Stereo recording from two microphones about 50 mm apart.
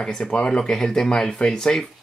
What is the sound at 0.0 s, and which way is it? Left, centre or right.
Speech, centre.